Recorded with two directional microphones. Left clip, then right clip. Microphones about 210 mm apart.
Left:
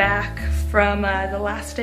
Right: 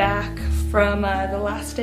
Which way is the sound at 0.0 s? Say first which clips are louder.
Left 2 dB; 5° right (ahead or behind).